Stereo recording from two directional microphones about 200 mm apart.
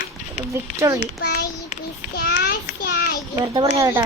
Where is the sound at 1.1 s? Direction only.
50° left (ahead or behind).